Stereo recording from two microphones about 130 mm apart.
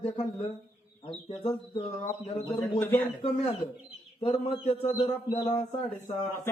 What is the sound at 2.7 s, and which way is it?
Speech, 15° left (ahead or behind).